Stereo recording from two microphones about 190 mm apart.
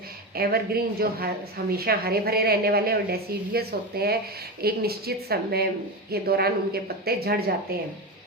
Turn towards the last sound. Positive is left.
turn(degrees=-55)  # may be behind; listen again after turning